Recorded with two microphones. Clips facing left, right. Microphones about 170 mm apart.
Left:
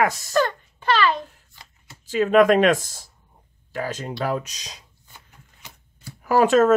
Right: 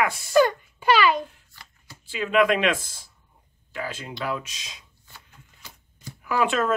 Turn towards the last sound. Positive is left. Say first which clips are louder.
# left 7 dB
turn(degrees=40)  # may be behind; listen again after turning